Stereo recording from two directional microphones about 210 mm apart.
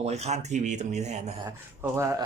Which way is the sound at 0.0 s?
30° right (ahead or behind).